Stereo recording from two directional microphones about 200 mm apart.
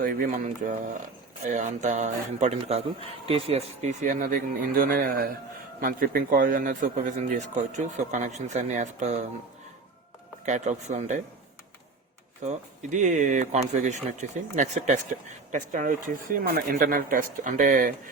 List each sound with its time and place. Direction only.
0.0 s a man's voice: 45° right (ahead or behind)
10.4 s a man's voice: 35° right (ahead or behind)
12.5 s a man's voice: 35° right (ahead or behind)